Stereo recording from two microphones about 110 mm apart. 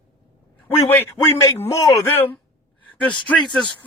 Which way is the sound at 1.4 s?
25° left (ahead or behind).